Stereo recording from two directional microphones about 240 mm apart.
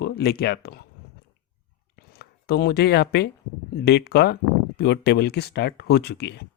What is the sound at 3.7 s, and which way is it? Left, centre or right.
Speech, left.